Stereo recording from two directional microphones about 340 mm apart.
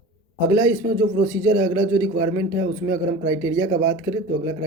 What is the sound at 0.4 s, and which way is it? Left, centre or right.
Speech, centre.